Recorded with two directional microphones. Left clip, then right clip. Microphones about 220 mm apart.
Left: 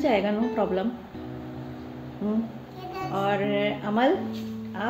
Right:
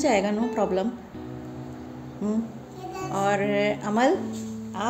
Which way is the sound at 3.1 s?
10° right (ahead or behind).